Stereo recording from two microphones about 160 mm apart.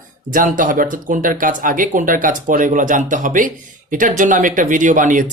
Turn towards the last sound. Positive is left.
turn(degrees=-55)  # may be behind; listen again after turning